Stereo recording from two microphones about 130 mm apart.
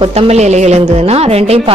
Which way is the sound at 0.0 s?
50° right (ahead or behind).